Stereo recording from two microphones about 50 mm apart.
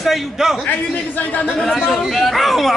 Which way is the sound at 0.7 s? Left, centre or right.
Left.